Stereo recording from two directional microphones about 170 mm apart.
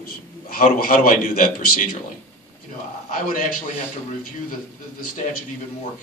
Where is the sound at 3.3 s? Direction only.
55° left (ahead or behind).